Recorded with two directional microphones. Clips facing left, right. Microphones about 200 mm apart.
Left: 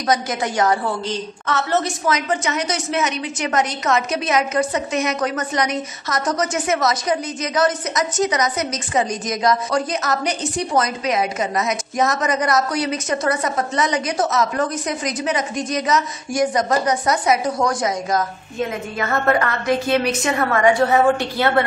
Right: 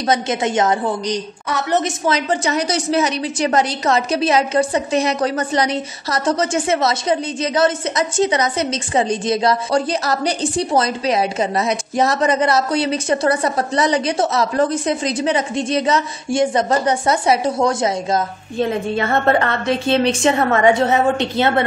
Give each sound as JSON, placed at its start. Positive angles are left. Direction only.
{"t": 0.1, "sound": "a woman's voice", "side_deg": -25}
{"t": 2.0, "sound": "a woman's voice", "side_deg": -30}